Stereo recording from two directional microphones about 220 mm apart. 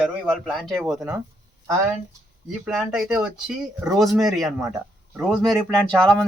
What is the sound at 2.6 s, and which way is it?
Speech, centre (ahead or behind).